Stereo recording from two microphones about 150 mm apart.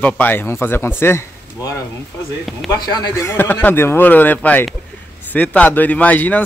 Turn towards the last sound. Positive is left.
turn(degrees=10)  # may be behind; listen again after turning